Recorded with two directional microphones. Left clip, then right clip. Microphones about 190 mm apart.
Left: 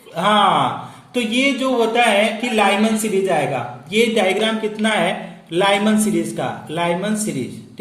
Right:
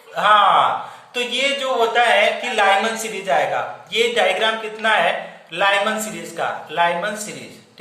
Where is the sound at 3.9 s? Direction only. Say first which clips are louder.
Left 1 dB; 40° left (ahead or behind).